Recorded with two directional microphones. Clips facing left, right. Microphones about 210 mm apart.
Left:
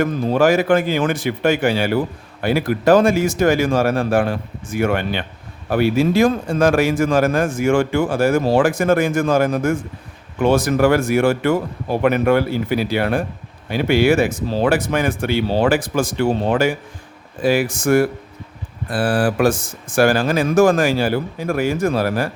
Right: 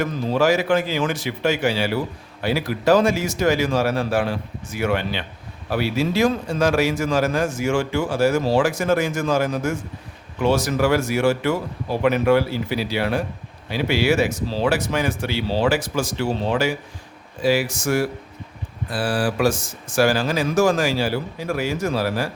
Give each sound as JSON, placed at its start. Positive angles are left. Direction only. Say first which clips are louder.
{"t": 0.0, "sound": "speech", "louder": "left 4 dB", "side_deg": 50}